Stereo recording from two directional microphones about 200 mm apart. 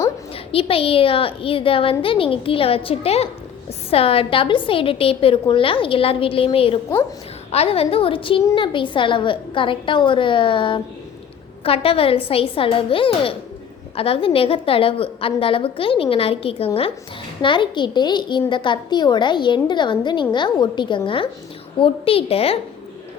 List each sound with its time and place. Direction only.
0.3 s a child's voice: 30° left (ahead or behind)